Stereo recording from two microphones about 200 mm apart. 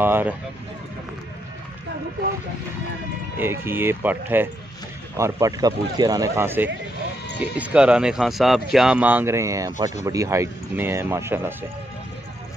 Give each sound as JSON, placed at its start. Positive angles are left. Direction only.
{"t": 0.0, "sound": "speech", "side_deg": -10}
{"t": 3.3, "sound": "speech", "side_deg": -10}